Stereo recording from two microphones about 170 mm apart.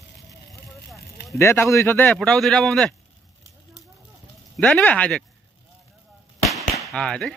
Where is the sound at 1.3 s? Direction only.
15° left (ahead or behind).